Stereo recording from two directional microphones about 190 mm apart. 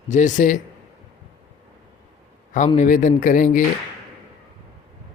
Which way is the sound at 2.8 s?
45° left (ahead or behind).